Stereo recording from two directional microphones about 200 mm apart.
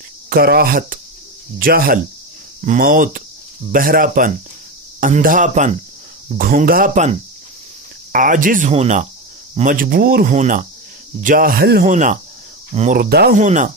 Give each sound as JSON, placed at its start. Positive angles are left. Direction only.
{"t": 0.3, "sound": "speech", "side_deg": -50}
{"t": 8.1, "sound": "speech", "side_deg": -40}
{"t": 13.4, "sound": "speech", "side_deg": -40}